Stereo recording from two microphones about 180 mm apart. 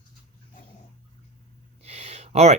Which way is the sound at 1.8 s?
35° right (ahead or behind).